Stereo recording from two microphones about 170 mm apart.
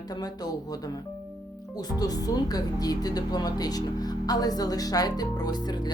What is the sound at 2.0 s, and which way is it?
Speech, 20° left (ahead or behind).